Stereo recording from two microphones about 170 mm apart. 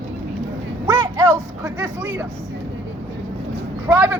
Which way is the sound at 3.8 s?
15° right (ahead or behind).